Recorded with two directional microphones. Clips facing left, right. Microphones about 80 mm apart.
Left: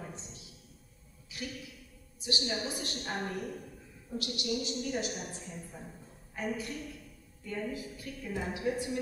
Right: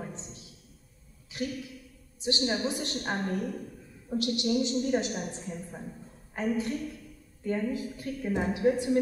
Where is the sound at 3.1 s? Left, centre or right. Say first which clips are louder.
Right 4 dB; right.